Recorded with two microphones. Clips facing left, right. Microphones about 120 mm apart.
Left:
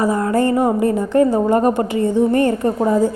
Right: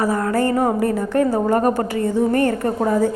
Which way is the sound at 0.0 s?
20° left (ahead or behind).